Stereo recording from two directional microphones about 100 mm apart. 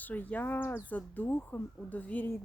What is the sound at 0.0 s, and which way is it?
Speech, 15° left (ahead or behind).